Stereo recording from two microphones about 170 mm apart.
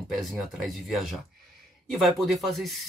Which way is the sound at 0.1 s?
Centre (ahead or behind).